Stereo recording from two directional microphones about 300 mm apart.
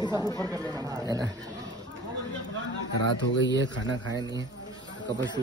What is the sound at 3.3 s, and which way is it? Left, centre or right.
Speech, left.